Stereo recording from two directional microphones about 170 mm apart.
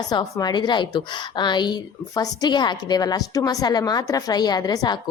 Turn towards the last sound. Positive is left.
turn(degrees=25)  # may be behind; listen again after turning